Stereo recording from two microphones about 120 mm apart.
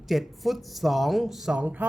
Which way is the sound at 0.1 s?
Centre (ahead or behind).